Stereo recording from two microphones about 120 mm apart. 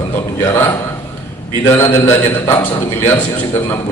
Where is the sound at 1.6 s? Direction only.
20° left (ahead or behind).